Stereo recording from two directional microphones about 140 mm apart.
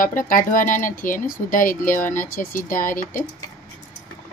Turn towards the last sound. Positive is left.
turn(degrees=75)  # may be behind; listen again after turning